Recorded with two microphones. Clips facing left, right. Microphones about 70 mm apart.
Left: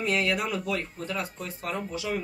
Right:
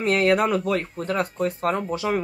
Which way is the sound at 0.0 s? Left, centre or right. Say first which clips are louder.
Right 8 dB; right.